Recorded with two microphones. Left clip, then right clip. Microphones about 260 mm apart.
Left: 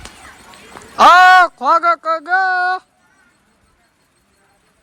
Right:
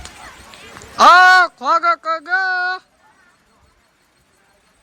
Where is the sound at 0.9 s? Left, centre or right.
Centre.